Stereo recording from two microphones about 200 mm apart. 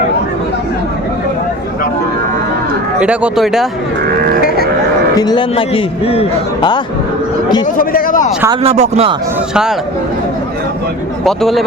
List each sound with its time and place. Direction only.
3.0 s speech: 5° right (ahead or behind)
4.4 s sheep: 50° left (ahead or behind)
5.1 s a man's voice: 20° left (ahead or behind)
7.8 s a man's voice: 45° left (ahead or behind)
8.6 s speech: 30° right (ahead or behind)
11.3 s speech: centre (ahead or behind)